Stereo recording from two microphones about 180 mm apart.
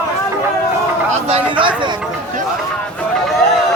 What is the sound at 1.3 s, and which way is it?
Speech, 30° right (ahead or behind).